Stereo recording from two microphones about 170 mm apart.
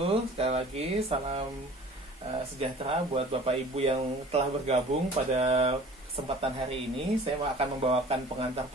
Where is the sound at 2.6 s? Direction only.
35° right (ahead or behind).